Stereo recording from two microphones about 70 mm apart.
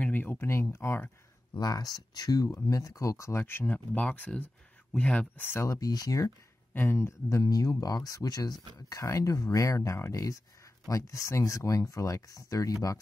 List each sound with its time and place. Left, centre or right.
0.0 s speech: left
1.5 s speech: left
2.5 s speech: left
5.4 s speech: left
5.7 s speech: left
6.7 s speech: left
7.0 s speech: left
9.0 s speech: left